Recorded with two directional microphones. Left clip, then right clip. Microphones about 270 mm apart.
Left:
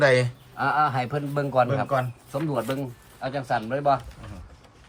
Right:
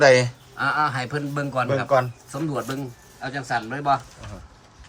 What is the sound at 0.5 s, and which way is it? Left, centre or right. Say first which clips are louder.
Speech: even; centre.